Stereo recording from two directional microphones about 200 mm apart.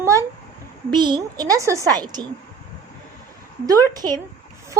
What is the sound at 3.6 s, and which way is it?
Speech, 20° right (ahead or behind).